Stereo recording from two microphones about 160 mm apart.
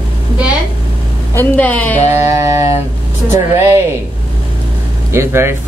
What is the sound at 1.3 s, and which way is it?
Speech, 10° left (ahead or behind).